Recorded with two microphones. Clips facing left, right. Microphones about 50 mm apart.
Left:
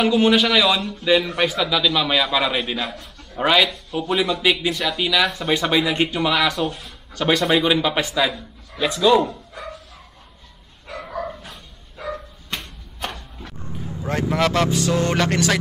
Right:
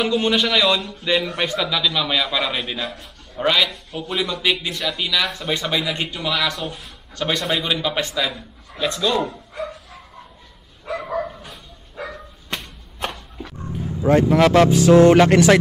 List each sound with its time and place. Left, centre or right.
0.0 s a man's voice: centre
6.5 s a man's voice: centre
9.2 s dog: centre
12.5 s a sound: centre
14.0 s speech: centre
14.7 s a sound: right
15.0 s speech: centre